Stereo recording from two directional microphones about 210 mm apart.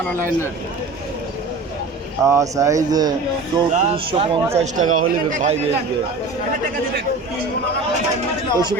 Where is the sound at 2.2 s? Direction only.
15° right (ahead or behind).